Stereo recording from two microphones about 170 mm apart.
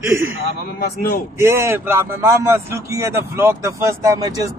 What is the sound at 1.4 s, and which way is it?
Speech, 15° right (ahead or behind).